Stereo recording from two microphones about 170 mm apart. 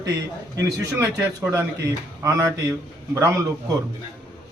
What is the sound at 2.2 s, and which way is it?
A man's voice, 15° right (ahead or behind).